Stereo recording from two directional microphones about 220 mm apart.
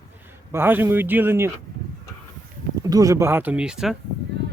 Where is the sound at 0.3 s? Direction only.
10° right (ahead or behind).